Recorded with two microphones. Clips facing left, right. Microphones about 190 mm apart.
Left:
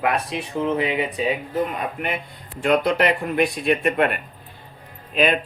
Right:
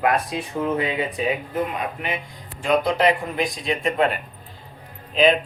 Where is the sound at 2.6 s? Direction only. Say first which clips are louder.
Even; 65° left (ahead or behind).